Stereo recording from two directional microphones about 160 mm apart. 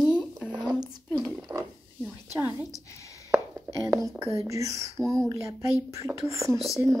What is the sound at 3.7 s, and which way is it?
A woman's voice, 20° right (ahead or behind).